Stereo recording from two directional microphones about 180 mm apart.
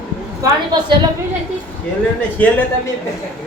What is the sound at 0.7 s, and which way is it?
Speech, 25° right (ahead or behind).